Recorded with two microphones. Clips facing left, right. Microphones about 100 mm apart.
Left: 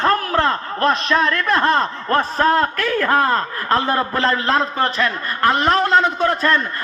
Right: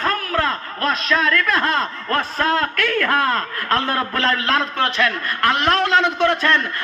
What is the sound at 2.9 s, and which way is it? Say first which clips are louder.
Speech: left 2 dB; 20° left (ahead or behind).